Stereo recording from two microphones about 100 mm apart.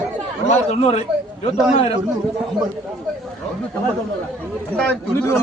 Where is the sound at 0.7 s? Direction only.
90° left.